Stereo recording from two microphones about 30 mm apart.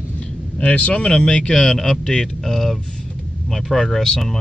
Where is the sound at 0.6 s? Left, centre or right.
Left.